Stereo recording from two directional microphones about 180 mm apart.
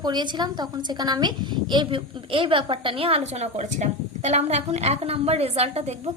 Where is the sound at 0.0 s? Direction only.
25° right (ahead or behind).